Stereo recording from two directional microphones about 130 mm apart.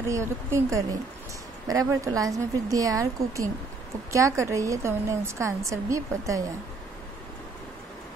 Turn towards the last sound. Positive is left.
turn(degrees=-25)  # may be behind; listen again after turning